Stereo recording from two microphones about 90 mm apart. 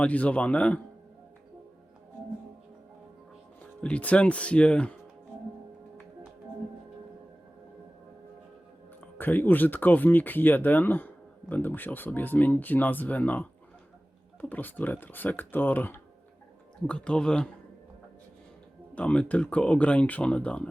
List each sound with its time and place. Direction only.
0.0 s speech: 15° left (ahead or behind)
3.8 s speech: 15° left (ahead or behind)
9.1 s speech: 20° left (ahead or behind)
14.5 s speech: 20° left (ahead or behind)
16.8 s speech: 10° left (ahead or behind)
18.9 s speech: 15° left (ahead or behind)